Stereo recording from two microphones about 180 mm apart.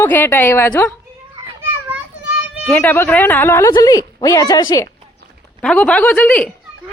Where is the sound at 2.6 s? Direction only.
10° left (ahead or behind).